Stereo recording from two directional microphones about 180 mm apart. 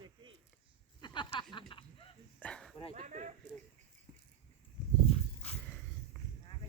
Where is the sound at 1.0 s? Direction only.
25° left (ahead or behind).